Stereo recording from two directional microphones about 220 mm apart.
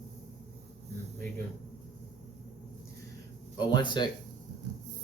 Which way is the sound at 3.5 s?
20° left (ahead or behind).